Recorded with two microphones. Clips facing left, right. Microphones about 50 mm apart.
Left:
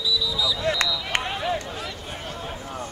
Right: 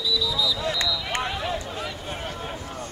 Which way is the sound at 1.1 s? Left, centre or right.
Left.